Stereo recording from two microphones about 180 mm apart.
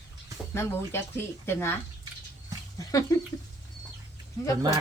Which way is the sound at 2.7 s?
20° left (ahead or behind).